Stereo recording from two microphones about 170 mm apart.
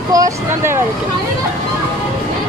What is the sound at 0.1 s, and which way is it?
Speech, 20° right (ahead or behind).